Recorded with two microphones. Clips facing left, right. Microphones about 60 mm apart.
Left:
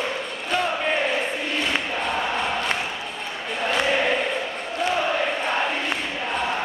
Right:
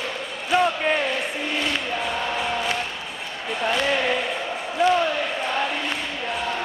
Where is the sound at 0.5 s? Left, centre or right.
Centre.